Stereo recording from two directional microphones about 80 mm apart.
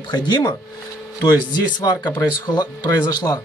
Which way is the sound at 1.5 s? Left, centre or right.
Left.